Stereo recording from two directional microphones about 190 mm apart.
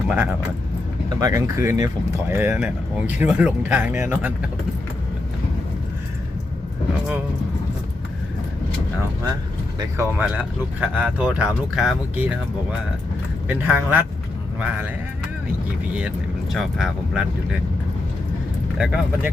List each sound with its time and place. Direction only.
0.1 s speech: 10° right (ahead or behind)
10.0 s speech: 10° right (ahead or behind)
13.5 s speech: 10° right (ahead or behind)
16.0 s speech: 5° right (ahead or behind)
18.8 s speech: 5° right (ahead or behind)